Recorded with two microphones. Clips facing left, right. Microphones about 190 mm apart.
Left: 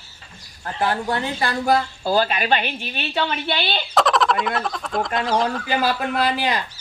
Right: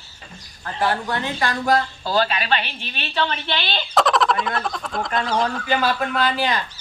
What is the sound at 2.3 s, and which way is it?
Speech, 15° left (ahead or behind).